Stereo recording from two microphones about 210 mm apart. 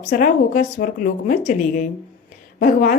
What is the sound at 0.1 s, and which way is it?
Speech, 40° left (ahead or behind).